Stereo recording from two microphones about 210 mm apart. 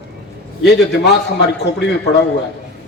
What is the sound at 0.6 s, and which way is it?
Speech, 55° left (ahead or behind).